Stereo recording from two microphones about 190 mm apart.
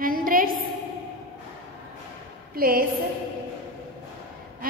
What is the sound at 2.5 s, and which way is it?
Speech, 50° right (ahead or behind).